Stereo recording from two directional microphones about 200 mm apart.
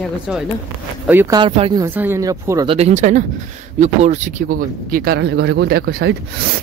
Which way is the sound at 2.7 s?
35° right (ahead or behind).